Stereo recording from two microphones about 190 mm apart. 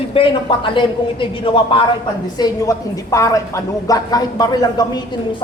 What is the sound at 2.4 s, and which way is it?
A woman's voice, 15° left (ahead or behind).